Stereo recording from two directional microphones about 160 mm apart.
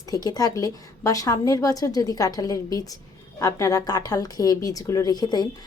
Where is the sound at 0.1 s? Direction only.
25° left (ahead or behind).